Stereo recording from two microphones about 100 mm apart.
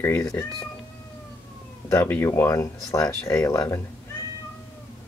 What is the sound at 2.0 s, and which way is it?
Speech, 25° left (ahead or behind).